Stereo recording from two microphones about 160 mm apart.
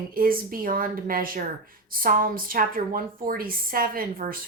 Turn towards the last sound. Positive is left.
turn(degrees=-65)  # may be behind; listen again after turning